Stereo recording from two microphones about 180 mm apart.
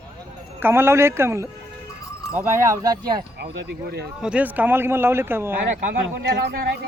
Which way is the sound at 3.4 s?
65° right (ahead or behind).